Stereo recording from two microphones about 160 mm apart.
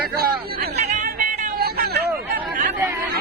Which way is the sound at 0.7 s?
50° right (ahead or behind).